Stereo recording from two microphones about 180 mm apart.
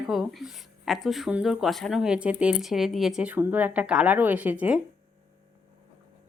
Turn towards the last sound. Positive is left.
turn(degrees=-10)  # may be behind; listen again after turning